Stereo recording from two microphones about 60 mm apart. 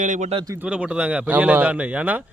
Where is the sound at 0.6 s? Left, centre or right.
Centre.